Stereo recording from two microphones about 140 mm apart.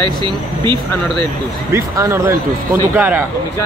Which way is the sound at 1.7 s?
20° right (ahead or behind).